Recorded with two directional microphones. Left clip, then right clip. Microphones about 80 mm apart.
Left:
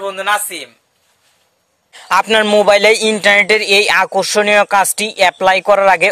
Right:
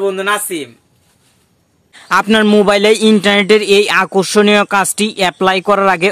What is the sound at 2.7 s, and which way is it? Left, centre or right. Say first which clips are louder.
Speech: even; left.